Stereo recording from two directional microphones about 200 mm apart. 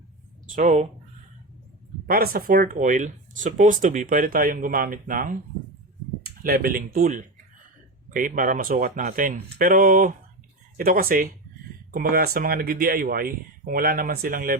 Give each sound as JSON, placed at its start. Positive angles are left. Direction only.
{"t": 0.4, "sound": "speech", "side_deg": -40}
{"t": 2.0, "sound": "speech", "side_deg": -50}